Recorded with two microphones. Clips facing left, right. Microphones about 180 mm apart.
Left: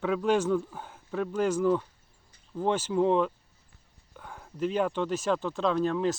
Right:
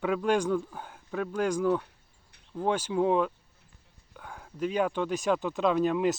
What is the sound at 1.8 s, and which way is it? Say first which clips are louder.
Insect: right 1 dB; 65° right (ahead or behind).